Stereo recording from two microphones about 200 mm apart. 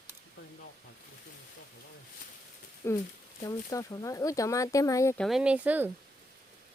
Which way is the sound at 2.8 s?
15° left (ahead or behind).